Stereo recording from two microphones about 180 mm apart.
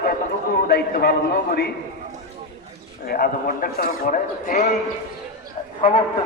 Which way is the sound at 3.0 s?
55° left (ahead or behind).